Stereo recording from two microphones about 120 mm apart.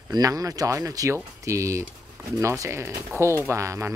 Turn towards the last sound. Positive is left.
turn(degrees=-25)  # may be behind; listen again after turning